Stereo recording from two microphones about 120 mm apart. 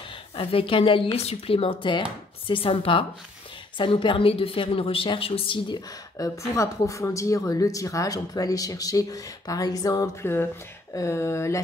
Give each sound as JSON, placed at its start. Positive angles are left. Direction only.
{"t": 0.4, "sound": "a woman's voice", "side_deg": 50}
{"t": 6.1, "sound": "speech", "side_deg": 30}
{"t": 10.2, "sound": "speech", "side_deg": 20}